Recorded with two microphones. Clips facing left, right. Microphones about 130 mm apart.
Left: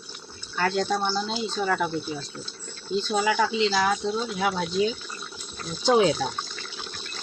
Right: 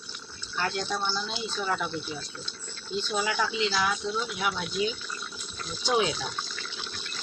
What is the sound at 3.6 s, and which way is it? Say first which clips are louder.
Speech: left 5 dB; 45° left (ahead or behind).